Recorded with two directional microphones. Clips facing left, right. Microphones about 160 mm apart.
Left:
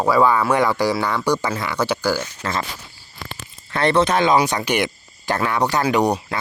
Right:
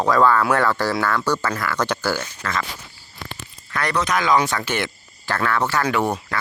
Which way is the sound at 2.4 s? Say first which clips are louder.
Left 1 dB; 25° left (ahead or behind).